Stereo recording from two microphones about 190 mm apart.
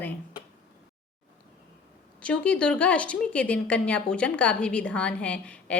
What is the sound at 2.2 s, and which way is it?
A woman's voice, 5° left (ahead or behind).